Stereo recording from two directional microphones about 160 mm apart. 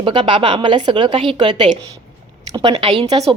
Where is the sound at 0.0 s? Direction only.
30° right (ahead or behind).